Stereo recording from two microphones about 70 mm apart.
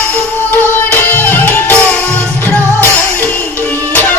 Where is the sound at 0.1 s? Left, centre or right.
Left.